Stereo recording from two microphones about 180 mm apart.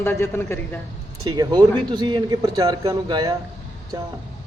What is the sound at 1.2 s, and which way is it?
A man's voice, 20° right (ahead or behind).